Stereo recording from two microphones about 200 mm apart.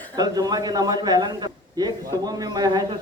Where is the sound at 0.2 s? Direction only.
20° right (ahead or behind).